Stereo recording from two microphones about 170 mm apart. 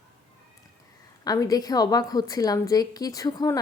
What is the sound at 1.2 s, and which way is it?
Speech, 20° left (ahead or behind).